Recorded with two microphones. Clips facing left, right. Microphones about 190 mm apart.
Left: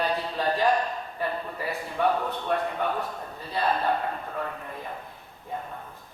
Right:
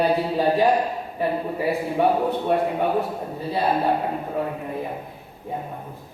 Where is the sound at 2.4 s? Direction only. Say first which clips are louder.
Right 4 dB; 10° right (ahead or behind).